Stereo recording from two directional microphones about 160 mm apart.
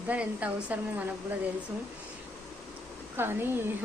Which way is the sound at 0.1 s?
10° right (ahead or behind).